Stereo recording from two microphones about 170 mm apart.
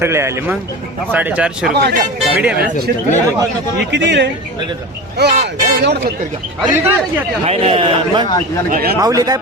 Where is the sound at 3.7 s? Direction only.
90° right.